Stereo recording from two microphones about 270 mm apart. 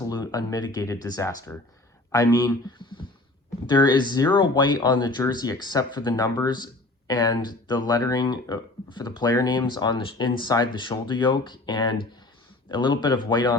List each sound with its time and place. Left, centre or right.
0.1 s speech: centre